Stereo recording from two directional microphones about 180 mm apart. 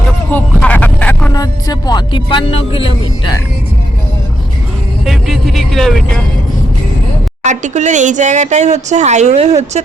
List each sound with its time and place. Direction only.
0.3 s a sound: 10° left (ahead or behind)
1.3 s speech: 20° left (ahead or behind)
5.0 s speech: centre (ahead or behind)
7.4 s speech: 40° right (ahead or behind)